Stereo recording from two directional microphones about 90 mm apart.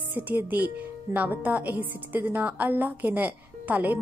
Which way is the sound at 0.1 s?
20° right (ahead or behind).